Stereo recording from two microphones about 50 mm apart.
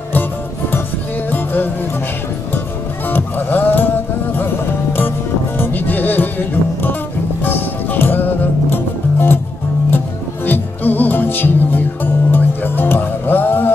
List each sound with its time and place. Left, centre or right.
0.1 s music: left
3.1 s music: left
5.6 s music: left